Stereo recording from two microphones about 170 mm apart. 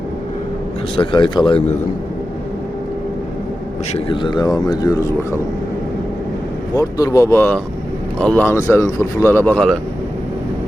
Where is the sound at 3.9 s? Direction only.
30° left (ahead or behind).